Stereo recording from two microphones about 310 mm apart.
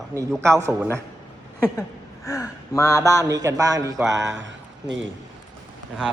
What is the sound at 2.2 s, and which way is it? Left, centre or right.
Speech, centre.